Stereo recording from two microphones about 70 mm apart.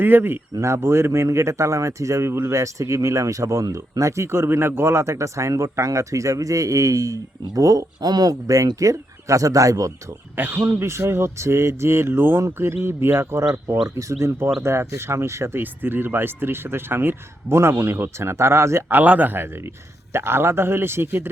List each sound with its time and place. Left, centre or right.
0.0 s speech: right
0.6 s speech: right
10.3 s speech: right
15.5 s speech: right